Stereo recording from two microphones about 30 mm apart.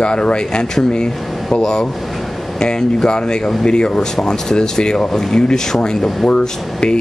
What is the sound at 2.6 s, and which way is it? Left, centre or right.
Speech, left.